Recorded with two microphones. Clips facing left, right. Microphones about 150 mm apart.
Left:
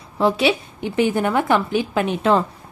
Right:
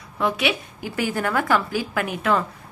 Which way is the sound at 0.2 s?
30° left (ahead or behind).